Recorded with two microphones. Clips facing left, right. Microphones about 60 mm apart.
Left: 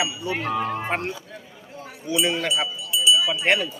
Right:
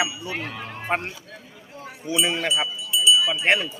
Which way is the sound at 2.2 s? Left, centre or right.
Centre.